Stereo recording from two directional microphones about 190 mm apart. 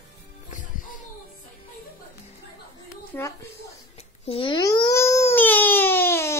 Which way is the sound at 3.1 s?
15° left (ahead or behind).